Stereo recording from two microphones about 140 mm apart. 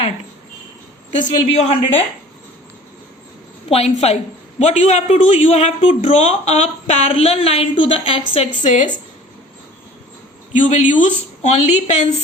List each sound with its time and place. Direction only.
1.2 s a man's voice: 50° left (ahead or behind)
3.7 s a man's voice: 50° left (ahead or behind)
8.3 s a man's voice: 50° left (ahead or behind)
10.5 s speech: 60° left (ahead or behind)